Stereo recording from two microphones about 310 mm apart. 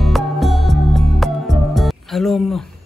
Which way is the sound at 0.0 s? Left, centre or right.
Centre.